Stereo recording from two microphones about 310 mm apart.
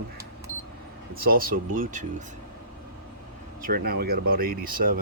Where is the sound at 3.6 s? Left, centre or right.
Right.